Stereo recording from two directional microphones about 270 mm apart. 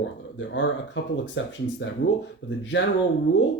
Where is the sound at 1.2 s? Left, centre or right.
Left.